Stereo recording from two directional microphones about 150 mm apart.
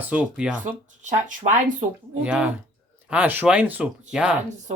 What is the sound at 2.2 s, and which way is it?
Speech, 10° right (ahead or behind).